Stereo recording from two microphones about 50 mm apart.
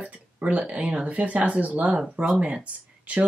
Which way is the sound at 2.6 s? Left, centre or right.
Right.